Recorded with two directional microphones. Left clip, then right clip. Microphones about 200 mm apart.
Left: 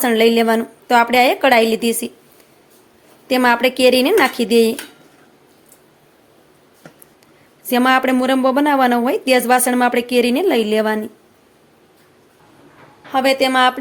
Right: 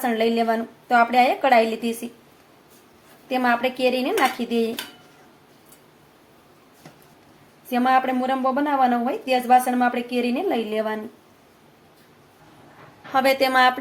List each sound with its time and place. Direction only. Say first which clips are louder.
0.0 s a woman's voice: left 7 dB; 50° left (ahead or behind)
3.2 s a woman's voice: left 7 dB; 50° left (ahead or behind)
7.7 s a woman's voice: left 5 dB; 50° left (ahead or behind)
13.1 s a woman's voice: left 3 dB; 20° left (ahead or behind)